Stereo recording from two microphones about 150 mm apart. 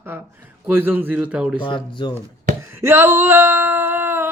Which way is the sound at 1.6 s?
30° left (ahead or behind).